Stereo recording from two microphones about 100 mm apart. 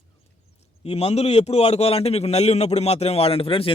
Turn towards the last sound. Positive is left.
turn(degrees=70)  # may be behind; listen again after turning